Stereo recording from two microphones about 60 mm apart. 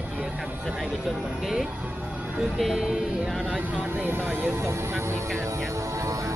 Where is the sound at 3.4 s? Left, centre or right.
Right.